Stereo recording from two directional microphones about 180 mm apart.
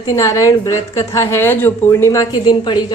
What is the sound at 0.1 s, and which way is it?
A woman's voice, 15° left (ahead or behind).